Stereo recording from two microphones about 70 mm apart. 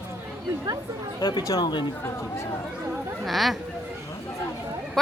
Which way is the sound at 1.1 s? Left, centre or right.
Left.